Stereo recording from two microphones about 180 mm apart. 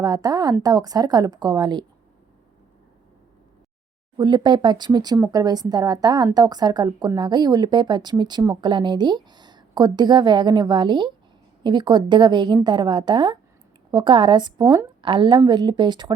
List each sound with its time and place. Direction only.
0.0 s speech: 20° right (ahead or behind)
4.2 s speech: 25° right (ahead or behind)